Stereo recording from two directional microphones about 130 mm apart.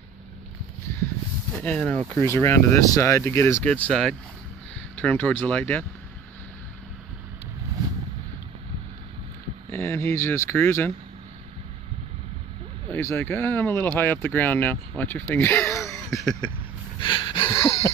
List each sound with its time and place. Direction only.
1.5 s speech: 10° left (ahead or behind)
9.7 s speech: 15° left (ahead or behind)
12.9 s speech: 15° left (ahead or behind)
17.0 s a sound: 40° left (ahead or behind)